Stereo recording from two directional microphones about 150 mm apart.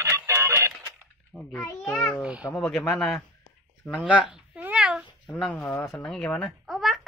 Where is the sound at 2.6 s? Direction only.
5° left (ahead or behind).